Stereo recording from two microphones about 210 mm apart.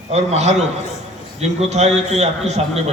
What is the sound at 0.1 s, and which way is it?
A man's voice, 30° right (ahead or behind).